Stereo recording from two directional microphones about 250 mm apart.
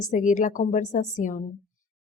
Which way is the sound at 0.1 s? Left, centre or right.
Left.